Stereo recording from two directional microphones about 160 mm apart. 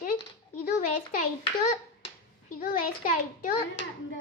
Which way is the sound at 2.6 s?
65° left (ahead or behind).